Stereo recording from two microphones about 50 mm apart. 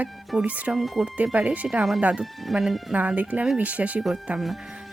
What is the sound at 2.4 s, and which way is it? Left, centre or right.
Speech, centre.